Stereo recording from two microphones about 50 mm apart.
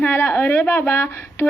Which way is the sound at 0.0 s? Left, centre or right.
Left.